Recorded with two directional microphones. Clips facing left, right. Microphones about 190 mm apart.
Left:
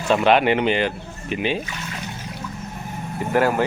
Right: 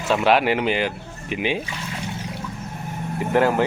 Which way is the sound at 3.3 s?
20° right (ahead or behind).